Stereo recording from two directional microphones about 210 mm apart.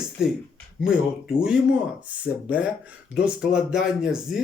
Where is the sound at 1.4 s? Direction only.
5° right (ahead or behind).